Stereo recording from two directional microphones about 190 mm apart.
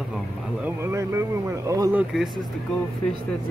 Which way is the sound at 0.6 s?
15° right (ahead or behind).